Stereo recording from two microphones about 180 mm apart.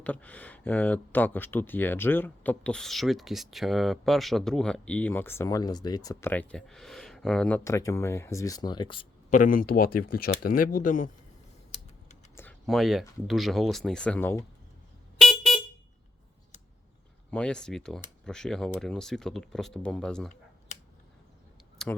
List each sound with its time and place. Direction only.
0.0 s speech: 10° left (ahead or behind); by 9.0 s 25° left (ahead or behind)
9.3 s speech: 50° left (ahead or behind)
12.4 s computer keyboard: 5° left (ahead or behind)
13.2 s speech: centre (ahead or behind)
15.2 s vehicle horn: centre (ahead or behind)
17.3 s speech: 5° left (ahead or behind)
21.8 s speech: centre (ahead or behind)